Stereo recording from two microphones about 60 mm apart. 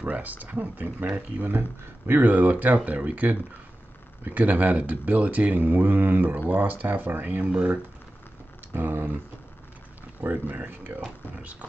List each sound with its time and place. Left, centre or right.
0.0 s speech: right
8.7 s speech: right
10.2 s speech: right